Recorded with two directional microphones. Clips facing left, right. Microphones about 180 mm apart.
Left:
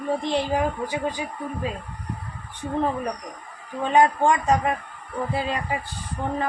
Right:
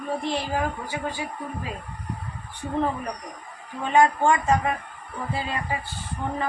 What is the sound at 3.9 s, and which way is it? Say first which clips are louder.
Speech: left 1 dB; 20° left (ahead or behind).